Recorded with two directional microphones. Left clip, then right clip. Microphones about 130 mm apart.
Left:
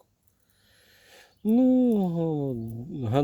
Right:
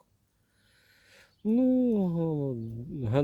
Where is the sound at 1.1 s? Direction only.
35° left (ahead or behind).